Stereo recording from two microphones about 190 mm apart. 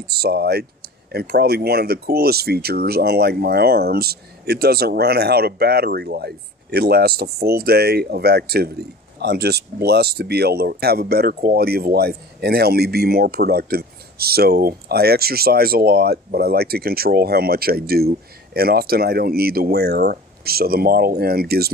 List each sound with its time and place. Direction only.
0.0 s speech: 55° right (ahead or behind)